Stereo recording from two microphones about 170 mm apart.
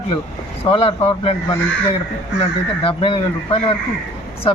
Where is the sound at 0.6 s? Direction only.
35° left (ahead or behind).